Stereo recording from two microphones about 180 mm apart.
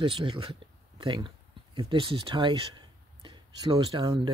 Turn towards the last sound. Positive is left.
turn(degrees=-25)  # may be behind; listen again after turning